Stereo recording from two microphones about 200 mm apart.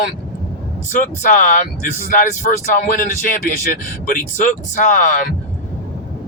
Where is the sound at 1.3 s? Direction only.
40° left (ahead or behind).